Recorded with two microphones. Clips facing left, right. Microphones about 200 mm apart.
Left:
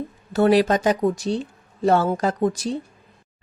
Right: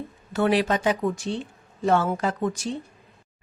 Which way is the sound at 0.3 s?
40° left (ahead or behind).